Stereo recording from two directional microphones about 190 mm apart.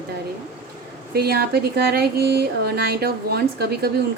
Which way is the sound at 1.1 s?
55° right (ahead or behind).